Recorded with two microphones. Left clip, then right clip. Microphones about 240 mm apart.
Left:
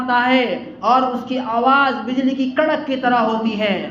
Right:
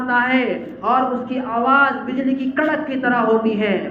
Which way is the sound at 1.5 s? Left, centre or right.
Left.